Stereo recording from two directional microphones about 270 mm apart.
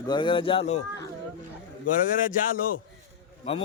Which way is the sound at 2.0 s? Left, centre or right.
Left.